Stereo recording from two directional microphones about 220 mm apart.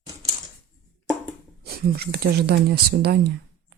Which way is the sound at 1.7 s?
45° right (ahead or behind).